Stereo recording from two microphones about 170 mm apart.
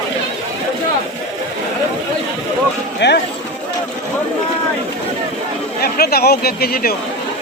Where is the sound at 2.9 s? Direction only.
80° left.